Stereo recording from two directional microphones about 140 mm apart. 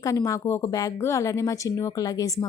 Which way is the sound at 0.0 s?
20° left (ahead or behind).